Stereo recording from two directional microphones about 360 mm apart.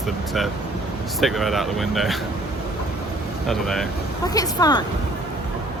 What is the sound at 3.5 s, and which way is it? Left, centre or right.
Speech, centre.